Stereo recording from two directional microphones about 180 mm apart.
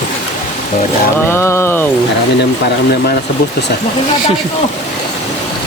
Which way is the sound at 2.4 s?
65° left (ahead or behind).